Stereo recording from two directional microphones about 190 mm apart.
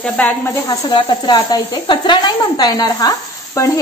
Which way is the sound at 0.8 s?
25° left (ahead or behind).